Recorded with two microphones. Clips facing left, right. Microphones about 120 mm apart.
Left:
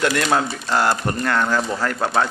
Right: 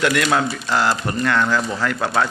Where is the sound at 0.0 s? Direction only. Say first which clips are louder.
Right 1 dB; 35° left (ahead or behind).